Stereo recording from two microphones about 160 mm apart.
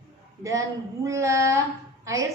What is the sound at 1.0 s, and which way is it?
A woman's voice, 20° right (ahead or behind).